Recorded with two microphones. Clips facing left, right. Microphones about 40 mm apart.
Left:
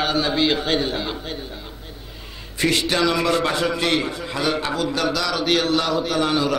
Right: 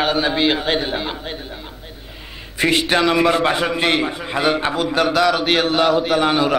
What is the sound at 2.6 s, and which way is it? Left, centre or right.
A man's voice, right.